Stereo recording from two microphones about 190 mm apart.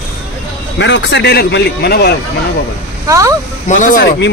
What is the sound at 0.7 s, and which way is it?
A man's voice, 65° left (ahead or behind).